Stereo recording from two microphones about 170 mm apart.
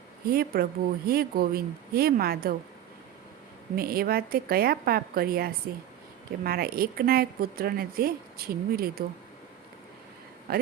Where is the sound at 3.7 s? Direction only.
60° right (ahead or behind).